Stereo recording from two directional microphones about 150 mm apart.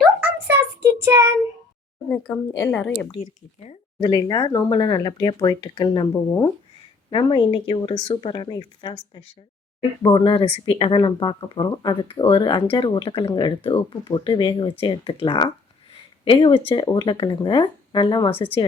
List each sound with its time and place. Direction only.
0.2 s child singing: 15° right (ahead or behind)
2.0 s speech: 10° left (ahead or behind)
4.0 s speech: 25° left (ahead or behind)
7.1 s speech: 35° left (ahead or behind)